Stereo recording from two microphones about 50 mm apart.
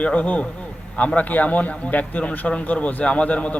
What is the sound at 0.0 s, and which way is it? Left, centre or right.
A man's voice, left.